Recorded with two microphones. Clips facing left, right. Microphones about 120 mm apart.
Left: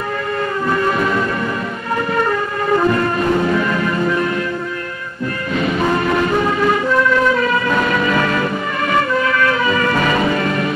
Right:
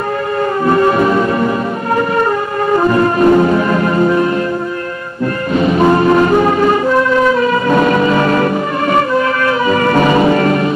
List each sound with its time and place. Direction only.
0.7 s music: 35° right (ahead or behind)
2.8 s brass instrument: 30° right (ahead or behind)
5.5 s music: 35° right (ahead or behind)
10.3 s music: 40° right (ahead or behind)